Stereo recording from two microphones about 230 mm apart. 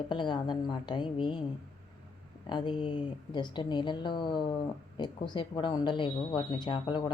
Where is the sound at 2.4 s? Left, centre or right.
Centre.